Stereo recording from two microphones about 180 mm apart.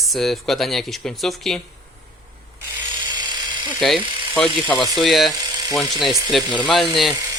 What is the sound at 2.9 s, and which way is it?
Electric toothbrush, 25° right (ahead or behind).